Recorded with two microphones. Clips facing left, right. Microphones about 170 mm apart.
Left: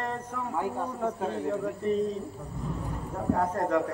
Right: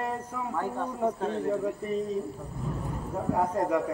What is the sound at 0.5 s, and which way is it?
A man's voice, 10° left (ahead or behind).